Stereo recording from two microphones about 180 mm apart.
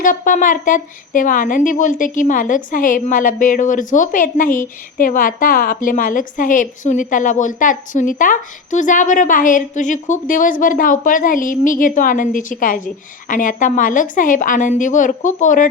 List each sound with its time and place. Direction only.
0.0 s a woman's voice: 50° left (ahead or behind)